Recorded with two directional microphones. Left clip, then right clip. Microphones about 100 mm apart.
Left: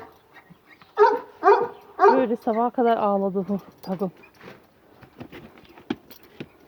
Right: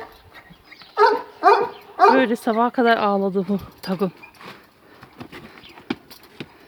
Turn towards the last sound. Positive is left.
turn(degrees=5)  # may be behind; listen again after turning